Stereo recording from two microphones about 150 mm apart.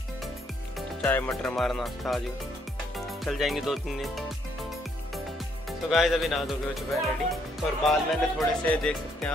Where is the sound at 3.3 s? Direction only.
Centre (ahead or behind).